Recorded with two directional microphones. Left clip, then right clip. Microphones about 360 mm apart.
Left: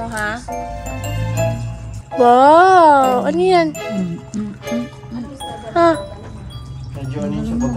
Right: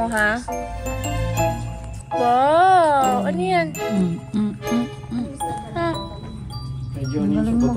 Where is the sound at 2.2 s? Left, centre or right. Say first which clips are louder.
Left 7 dB; centre.